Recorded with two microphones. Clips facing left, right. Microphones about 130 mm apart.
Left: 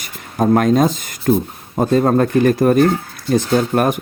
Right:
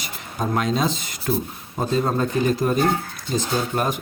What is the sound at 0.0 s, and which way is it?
A man's voice, 50° left (ahead or behind).